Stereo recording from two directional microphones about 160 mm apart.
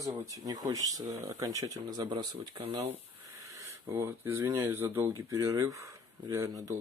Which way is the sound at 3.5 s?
20° right (ahead or behind).